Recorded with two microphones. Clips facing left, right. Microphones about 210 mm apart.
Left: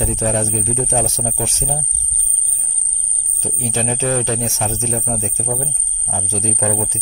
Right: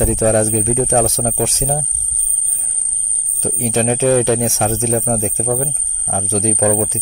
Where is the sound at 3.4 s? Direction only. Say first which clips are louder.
Right 6 dB; 60° right (ahead or behind); by 6.6 s 80° right.